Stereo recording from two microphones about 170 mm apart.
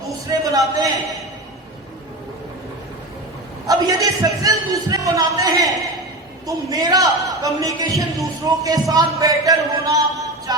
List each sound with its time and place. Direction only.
0.3 s a man's voice: 20° right (ahead or behind)
3.7 s a man's voice: 20° right (ahead or behind)